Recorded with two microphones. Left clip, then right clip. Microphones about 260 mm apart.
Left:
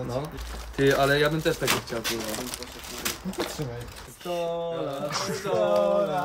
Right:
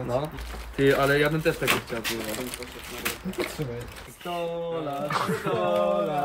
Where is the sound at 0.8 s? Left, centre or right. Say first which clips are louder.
Even; centre.